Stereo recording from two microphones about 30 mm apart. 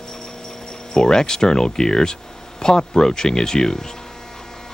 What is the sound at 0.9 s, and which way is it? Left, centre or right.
Speech, left.